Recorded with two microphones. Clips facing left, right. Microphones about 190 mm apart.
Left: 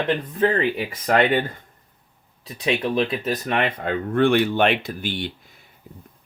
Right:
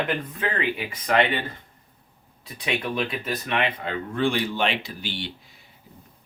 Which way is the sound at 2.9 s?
40° left (ahead or behind).